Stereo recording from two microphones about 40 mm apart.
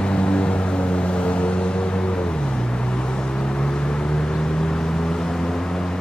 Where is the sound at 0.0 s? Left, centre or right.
Left.